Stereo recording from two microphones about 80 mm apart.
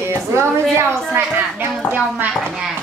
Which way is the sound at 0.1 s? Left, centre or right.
Right.